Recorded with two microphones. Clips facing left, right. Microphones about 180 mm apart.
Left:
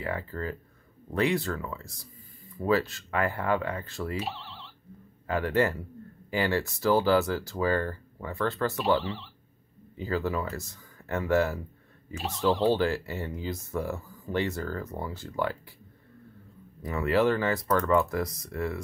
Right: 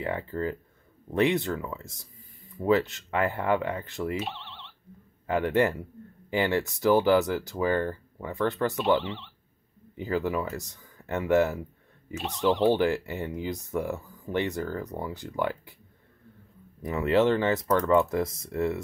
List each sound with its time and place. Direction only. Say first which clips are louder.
0.0 s speech: right 3 dB; 20° right (ahead or behind)
4.2 s a sound: even; 5° left (ahead or behind)
5.2 s speech: right 2 dB; 20° right (ahead or behind)
9.9 s speech: right 2 dB; 20° right (ahead or behind)
16.8 s speech: right 2 dB; 20° right (ahead or behind)